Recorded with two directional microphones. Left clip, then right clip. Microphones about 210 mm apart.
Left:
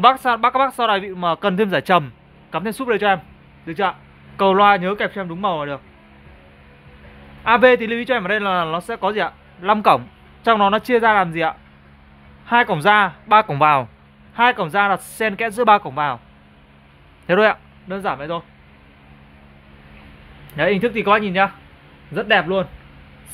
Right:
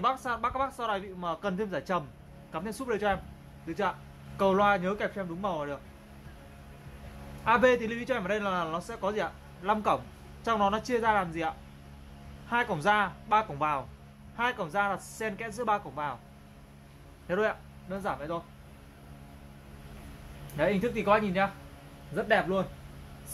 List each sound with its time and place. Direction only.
0.0 s speech: 50° left (ahead or behind)
7.4 s speech: 50° left (ahead or behind)
17.3 s speech: 50° left (ahead or behind)
20.5 s speech: 45° left (ahead or behind)